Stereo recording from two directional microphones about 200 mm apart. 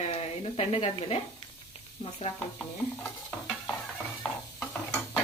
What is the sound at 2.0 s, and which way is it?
Sizzle, 30° left (ahead or behind).